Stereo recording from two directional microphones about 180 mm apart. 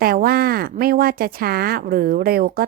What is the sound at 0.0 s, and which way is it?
A woman's voice, 55° right (ahead or behind).